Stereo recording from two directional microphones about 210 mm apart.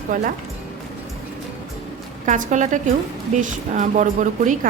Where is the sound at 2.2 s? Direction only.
35° right (ahead or behind).